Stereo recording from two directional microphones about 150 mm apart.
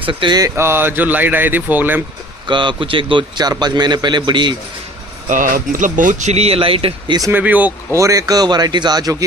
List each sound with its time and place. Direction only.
0.0 s a man's voice: 35° right (ahead or behind)
0.6 s speech: 15° right (ahead or behind)
2.4 s a man's voice: 30° right (ahead or behind)
5.3 s speech: 65° right (ahead or behind); by 7.2 s 40° right (ahead or behind)
7.2 s speech: 15° right (ahead or behind)